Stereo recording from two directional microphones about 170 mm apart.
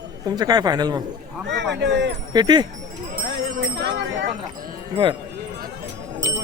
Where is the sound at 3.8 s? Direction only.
85° right.